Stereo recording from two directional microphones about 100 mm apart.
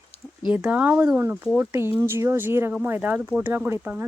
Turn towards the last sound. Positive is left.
turn(degrees=-15)  # may be behind; listen again after turning